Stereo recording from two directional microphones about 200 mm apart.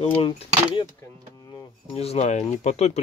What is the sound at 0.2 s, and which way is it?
Speech, 25° left (ahead or behind).